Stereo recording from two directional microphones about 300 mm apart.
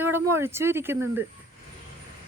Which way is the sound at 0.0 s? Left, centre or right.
Centre.